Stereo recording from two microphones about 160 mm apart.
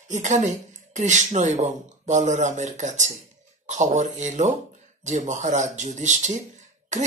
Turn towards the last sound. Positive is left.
turn(degrees=-50)  # may be behind; listen again after turning